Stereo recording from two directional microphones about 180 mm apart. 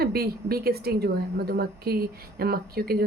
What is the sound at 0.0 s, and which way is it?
Speech, 60° right (ahead or behind).